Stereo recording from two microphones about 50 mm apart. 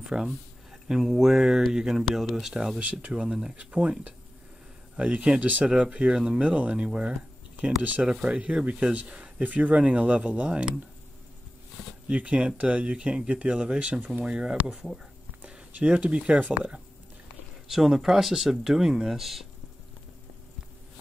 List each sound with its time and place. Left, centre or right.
0.1 s speech: centre
2.8 s speech: right
3.3 s speech: centre
3.5 s speech: right
12.1 s speech: right
14.2 s speech: centre
17.6 s speech: centre